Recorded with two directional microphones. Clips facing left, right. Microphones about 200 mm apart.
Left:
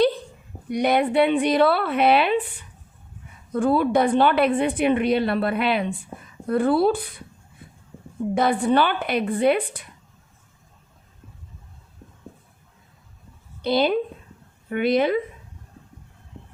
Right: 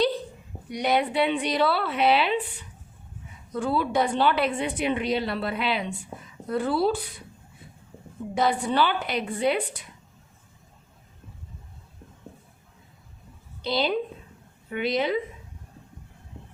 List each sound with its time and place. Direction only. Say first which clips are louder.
0.7 s a woman's voice: left 4 dB; 55° left (ahead or behind)
3.5 s a woman's voice: left 6 dB; 50° left (ahead or behind)
8.4 s a woman's voice: left 4 dB; 55° left (ahead or behind)
13.6 s a woman's voice: left 5 dB; 55° left (ahead or behind)